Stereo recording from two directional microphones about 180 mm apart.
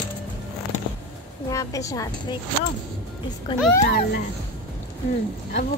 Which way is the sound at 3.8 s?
50° left (ahead or behind).